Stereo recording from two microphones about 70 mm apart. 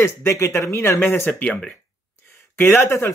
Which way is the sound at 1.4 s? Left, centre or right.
Centre.